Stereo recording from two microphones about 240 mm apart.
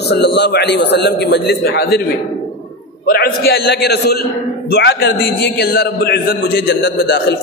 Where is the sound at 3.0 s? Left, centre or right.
Left.